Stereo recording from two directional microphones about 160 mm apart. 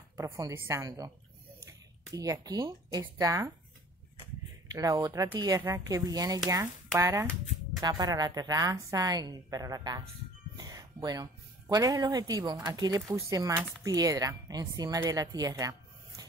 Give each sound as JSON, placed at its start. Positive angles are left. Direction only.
{"t": 0.2, "sound": "a woman's voice", "side_deg": -20}
{"t": 4.6, "sound": "a woman's voice", "side_deg": -20}
{"t": 10.6, "sound": "music", "side_deg": -25}
{"t": 11.7, "sound": "a woman's voice", "side_deg": -25}